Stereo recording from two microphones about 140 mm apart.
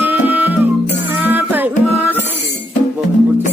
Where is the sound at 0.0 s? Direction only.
15° right (ahead or behind).